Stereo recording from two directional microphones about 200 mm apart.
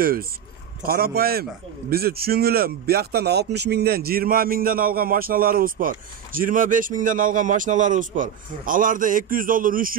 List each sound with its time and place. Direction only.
0.0 s speech: 45° right (ahead or behind)